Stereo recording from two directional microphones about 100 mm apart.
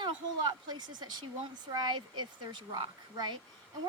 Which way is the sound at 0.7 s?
45° right (ahead or behind).